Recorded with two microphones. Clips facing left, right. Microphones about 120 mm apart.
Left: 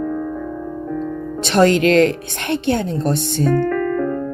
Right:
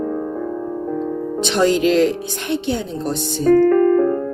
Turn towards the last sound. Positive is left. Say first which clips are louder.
# right 6 dB
turn(degrees=-35)  # may be behind; listen again after turning